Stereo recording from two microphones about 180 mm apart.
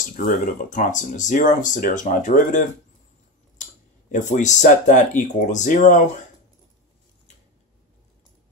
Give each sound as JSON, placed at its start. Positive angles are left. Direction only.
{"t": 0.0, "sound": "a sound", "side_deg": 50}
{"t": 0.5, "sound": "speech", "side_deg": 45}
{"t": 4.1, "sound": "speech", "side_deg": 45}